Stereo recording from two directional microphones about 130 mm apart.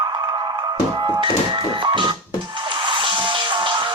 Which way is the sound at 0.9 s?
35° right (ahead or behind).